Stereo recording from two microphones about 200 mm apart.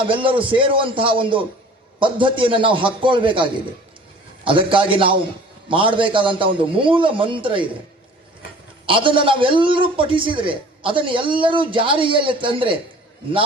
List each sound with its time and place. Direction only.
0.1 s a man's voice: 25° right (ahead or behind)
8.9 s a man's voice: 25° right (ahead or behind)